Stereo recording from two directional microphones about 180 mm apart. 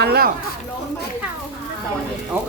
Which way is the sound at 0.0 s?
65° right (ahead or behind).